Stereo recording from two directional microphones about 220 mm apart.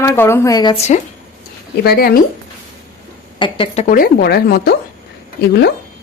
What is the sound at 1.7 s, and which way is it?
Speech, 45° left (ahead or behind).